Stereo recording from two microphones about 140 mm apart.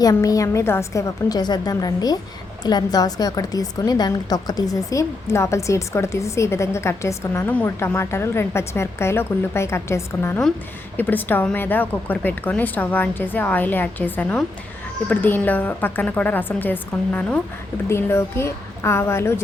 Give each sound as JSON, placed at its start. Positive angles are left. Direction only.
{"t": 0.0, "sound": "a woman's voice", "side_deg": 25}